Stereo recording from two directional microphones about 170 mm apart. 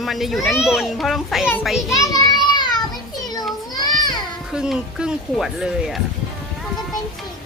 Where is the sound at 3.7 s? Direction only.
25° left (ahead or behind).